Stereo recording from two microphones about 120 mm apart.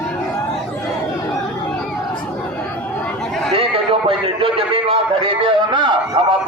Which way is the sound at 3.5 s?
50° right (ahead or behind).